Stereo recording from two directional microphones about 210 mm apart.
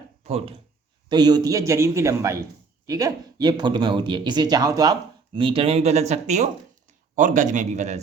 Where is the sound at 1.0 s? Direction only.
20° right (ahead or behind).